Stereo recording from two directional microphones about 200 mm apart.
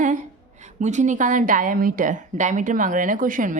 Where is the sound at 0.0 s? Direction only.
40° right (ahead or behind).